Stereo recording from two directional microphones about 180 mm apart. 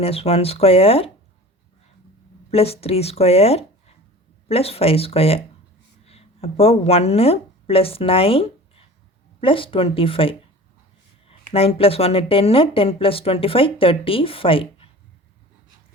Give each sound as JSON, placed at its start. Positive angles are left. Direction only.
{"t": 0.0, "sound": "speech", "side_deg": 35}
{"t": 2.5, "sound": "speech", "side_deg": 35}